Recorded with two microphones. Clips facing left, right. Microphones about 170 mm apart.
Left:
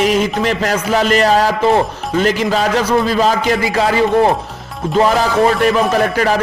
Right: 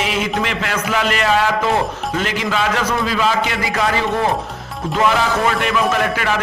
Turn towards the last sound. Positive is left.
turn(degrees=40)  # may be behind; listen again after turning